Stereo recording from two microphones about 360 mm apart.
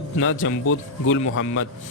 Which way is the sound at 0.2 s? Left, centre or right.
Left.